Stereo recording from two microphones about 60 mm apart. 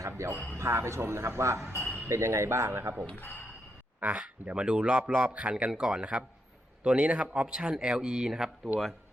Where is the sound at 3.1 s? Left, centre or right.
Left.